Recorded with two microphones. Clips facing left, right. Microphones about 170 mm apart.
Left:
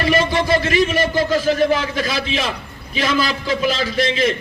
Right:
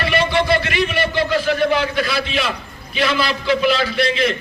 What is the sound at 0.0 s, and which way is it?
A man's voice, 40° left (ahead or behind).